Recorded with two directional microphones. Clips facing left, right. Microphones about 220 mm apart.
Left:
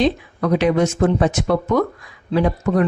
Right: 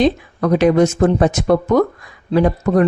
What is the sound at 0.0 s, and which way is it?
A woman's voice, 45° right (ahead or behind).